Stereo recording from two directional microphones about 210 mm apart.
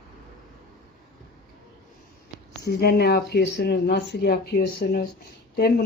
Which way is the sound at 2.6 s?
50° left (ahead or behind).